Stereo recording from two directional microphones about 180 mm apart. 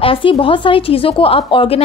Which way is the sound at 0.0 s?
30° left (ahead or behind).